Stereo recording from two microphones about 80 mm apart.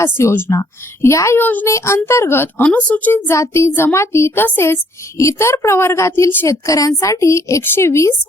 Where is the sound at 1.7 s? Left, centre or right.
Left.